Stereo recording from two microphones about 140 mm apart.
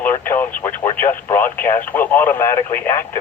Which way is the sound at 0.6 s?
10° left (ahead or behind).